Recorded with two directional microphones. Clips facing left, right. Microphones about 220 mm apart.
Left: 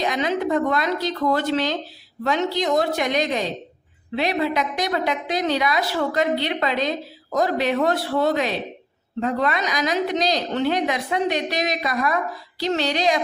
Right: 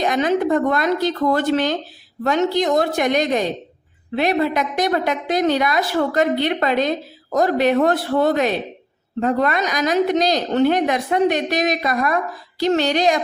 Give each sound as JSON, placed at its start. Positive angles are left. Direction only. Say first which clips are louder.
{"t": 0.0, "sound": "a woman's voice", "louder": "right 4 dB", "side_deg": -50}